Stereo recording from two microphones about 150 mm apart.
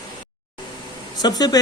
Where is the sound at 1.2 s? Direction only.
25° left (ahead or behind).